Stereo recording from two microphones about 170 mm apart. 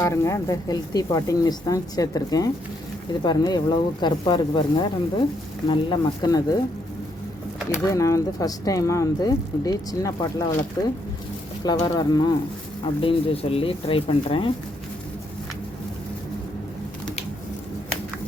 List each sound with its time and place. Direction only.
0.0 s speech: 15° left (ahead or behind)
7.7 s speech: 20° left (ahead or behind); by 14.5 s 35° left (ahead or behind)